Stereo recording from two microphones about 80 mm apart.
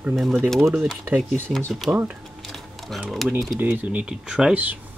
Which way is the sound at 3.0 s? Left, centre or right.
Centre.